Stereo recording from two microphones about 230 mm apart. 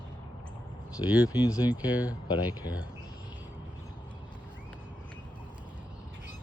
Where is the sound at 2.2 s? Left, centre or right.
Centre.